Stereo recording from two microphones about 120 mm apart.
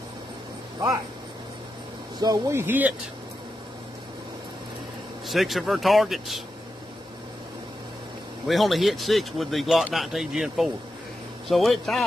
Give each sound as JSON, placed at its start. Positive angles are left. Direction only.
{"t": 2.1, "sound": "speech", "side_deg": -35}
{"t": 2.5, "sound": "speech", "side_deg": -15}
{"t": 5.3, "sound": "speech", "side_deg": 0}
{"t": 8.5, "sound": "speech", "side_deg": 0}